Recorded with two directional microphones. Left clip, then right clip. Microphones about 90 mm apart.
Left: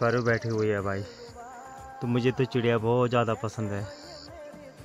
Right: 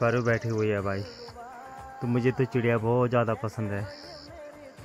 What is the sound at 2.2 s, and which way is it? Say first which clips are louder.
Speech: even; 5° left (ahead or behind).